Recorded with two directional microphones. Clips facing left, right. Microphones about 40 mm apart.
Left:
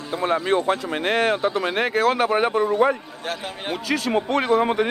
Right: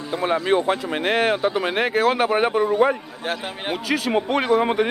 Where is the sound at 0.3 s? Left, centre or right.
Centre.